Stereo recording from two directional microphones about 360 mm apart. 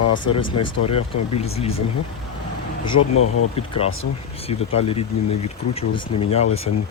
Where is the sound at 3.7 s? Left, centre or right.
Centre.